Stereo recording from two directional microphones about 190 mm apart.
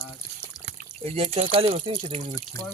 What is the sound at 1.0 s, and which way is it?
Speech, 35° right (ahead or behind).